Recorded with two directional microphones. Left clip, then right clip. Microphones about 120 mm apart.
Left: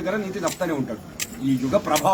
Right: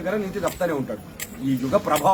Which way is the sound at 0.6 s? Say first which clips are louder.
Right 1 dB; 30° right (ahead or behind).